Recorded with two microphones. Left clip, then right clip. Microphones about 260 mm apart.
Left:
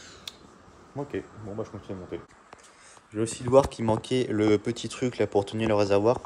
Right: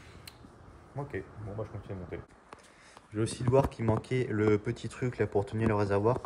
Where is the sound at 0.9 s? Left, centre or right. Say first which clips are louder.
Left 5 dB; left.